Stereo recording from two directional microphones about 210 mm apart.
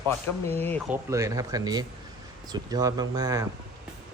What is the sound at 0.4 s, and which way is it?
Speech, 10° left (ahead or behind).